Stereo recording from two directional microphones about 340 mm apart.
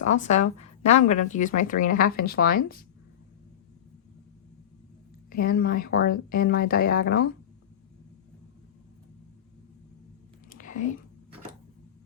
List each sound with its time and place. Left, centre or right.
0.0 s speech: left
5.3 s speech: left
10.5 s whispering: left